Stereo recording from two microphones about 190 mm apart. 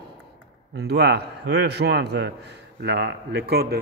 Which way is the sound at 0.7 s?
60° right (ahead or behind).